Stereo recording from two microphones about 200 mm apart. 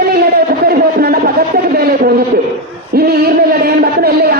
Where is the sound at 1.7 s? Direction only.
50° right (ahead or behind).